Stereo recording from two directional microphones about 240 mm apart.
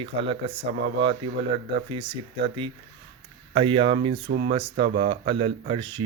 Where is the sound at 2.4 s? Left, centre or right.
Right.